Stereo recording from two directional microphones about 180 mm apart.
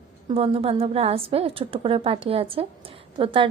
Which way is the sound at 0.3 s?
30° right (ahead or behind).